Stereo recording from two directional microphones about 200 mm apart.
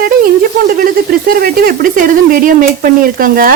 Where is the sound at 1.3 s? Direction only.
45° right (ahead or behind).